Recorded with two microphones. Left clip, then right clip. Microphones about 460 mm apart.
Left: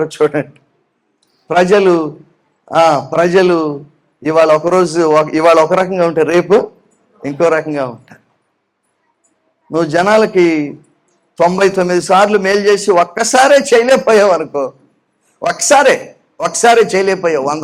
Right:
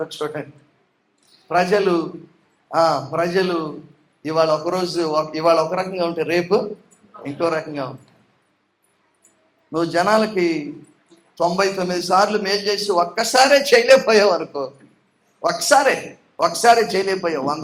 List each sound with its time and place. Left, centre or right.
0.0 s speech: left
1.5 s a man's voice: left
9.7 s a man's voice: left
11.3 s a man's voice: left
13.3 s speech: left
16.4 s a man's voice: left